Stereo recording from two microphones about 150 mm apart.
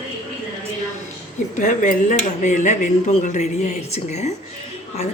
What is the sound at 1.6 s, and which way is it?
Speech, 60° left (ahead or behind).